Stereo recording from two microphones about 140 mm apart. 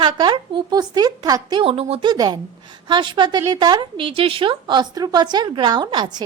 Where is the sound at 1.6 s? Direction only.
45° right (ahead or behind).